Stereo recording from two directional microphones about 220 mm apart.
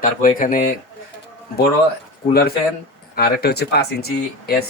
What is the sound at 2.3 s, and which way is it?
Speech, 45° left (ahead or behind).